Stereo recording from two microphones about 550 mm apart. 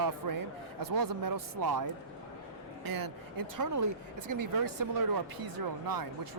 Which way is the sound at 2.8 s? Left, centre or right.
Right.